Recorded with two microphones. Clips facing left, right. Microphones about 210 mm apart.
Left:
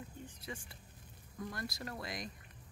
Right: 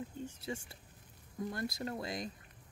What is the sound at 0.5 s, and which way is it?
Speech, 25° right (ahead or behind).